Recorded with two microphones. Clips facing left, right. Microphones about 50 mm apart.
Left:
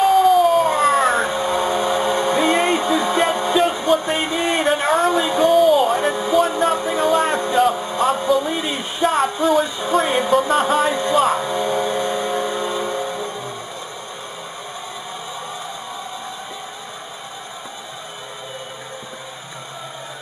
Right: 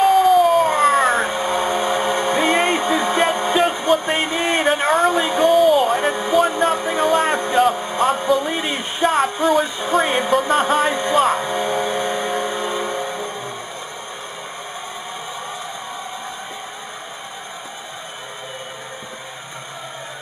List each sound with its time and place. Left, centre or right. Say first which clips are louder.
0.0 s a sound: even; centre
8.5 s speech: right 1 dB; centre
9.0 s music: even; centre